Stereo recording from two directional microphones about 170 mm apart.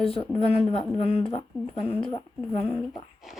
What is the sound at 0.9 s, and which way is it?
Speech, 35° left (ahead or behind).